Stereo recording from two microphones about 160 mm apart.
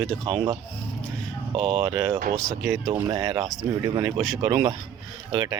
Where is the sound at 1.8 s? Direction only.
20° right (ahead or behind).